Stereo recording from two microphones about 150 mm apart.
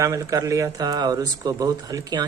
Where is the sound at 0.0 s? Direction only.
20° right (ahead or behind).